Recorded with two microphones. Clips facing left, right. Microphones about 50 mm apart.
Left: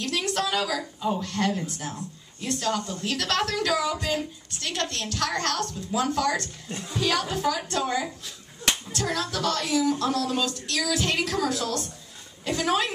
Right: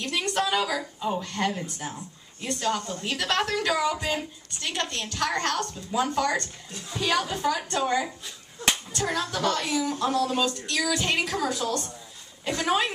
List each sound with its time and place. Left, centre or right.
0.0 s a woman's voice: centre